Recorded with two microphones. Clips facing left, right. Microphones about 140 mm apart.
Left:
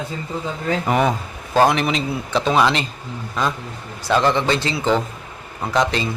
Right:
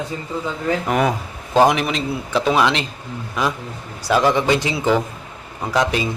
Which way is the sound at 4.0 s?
10° right (ahead or behind).